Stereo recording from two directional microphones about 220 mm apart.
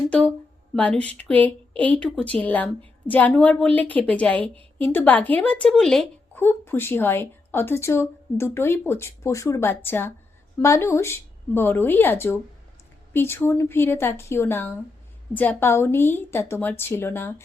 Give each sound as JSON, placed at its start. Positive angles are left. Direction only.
{"t": 0.1, "sound": "a woman's voice", "side_deg": 5}